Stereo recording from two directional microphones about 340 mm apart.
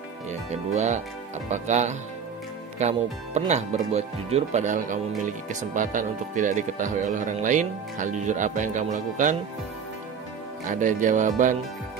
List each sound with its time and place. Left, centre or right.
0.3 s speech: right
10.7 s speech: right